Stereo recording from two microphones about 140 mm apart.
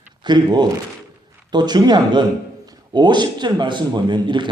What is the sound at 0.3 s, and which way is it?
A man's voice, 30° right (ahead or behind).